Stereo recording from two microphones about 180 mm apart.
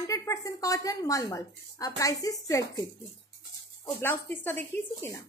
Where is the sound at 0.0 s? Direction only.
15° left (ahead or behind).